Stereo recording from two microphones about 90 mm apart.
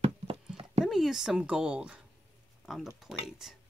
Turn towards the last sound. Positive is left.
turn(degrees=0)  # may be behind; listen again after turning